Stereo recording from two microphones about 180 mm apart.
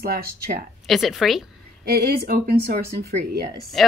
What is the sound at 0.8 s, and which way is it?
Speech, centre (ahead or behind).